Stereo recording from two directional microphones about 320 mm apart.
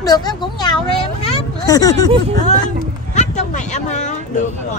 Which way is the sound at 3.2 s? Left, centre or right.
Left.